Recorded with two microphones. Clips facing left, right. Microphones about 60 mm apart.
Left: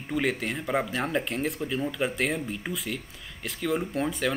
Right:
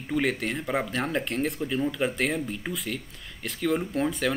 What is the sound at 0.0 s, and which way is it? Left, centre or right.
Speech, centre.